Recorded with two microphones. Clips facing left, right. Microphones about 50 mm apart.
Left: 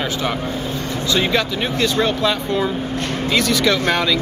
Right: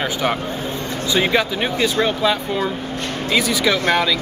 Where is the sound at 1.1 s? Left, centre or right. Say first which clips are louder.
Right 1 dB; centre.